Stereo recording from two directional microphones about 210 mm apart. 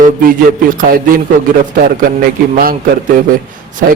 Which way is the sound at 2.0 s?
45° right (ahead or behind).